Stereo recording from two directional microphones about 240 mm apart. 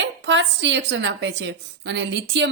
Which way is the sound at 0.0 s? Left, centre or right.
Right.